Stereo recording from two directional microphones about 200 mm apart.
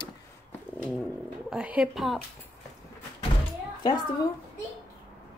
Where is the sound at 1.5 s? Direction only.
5° right (ahead or behind).